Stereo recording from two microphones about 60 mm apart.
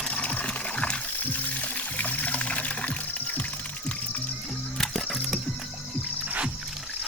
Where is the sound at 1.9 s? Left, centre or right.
Left.